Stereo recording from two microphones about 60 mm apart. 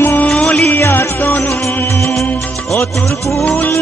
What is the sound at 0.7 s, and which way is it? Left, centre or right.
Music, left.